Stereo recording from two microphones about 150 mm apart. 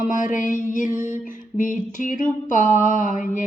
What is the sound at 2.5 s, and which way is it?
Mantra, 55° left (ahead or behind).